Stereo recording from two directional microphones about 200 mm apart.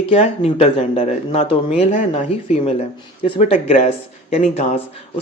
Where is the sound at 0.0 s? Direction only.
30° left (ahead or behind).